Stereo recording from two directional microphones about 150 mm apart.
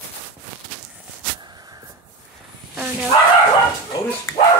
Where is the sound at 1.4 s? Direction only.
25° right (ahead or behind).